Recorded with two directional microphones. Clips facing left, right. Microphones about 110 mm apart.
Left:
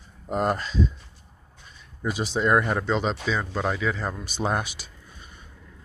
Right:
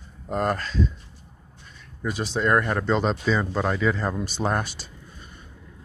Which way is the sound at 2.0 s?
15° left (ahead or behind).